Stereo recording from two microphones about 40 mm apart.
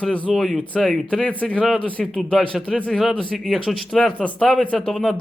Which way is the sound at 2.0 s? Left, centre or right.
Centre.